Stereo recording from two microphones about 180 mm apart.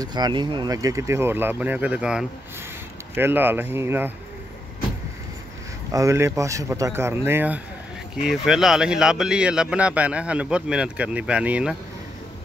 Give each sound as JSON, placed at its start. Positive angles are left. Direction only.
{"t": 0.0, "sound": "speech", "side_deg": -25}
{"t": 5.9, "sound": "a man's voice", "side_deg": -15}